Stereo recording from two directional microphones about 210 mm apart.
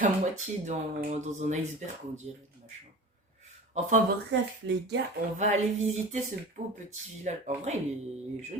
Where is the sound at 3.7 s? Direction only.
35° right (ahead or behind).